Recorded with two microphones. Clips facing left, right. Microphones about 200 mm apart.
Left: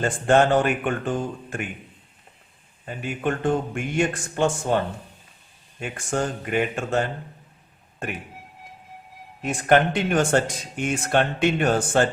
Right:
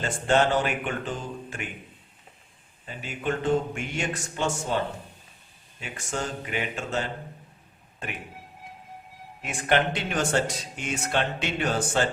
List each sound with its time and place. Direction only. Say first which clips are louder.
0.0 s speech: left 4 dB; 50° left (ahead or behind)
2.8 s speech: left 4 dB; 50° left (ahead or behind)
5.8 s speech: left 6 dB; 50° left (ahead or behind)
9.4 s speech: left 6 dB; 45° left (ahead or behind)